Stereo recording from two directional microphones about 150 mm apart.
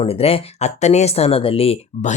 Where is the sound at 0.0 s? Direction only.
40° left (ahead or behind).